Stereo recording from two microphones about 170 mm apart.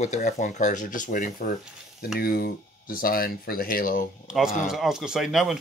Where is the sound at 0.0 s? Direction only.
45° left (ahead or behind).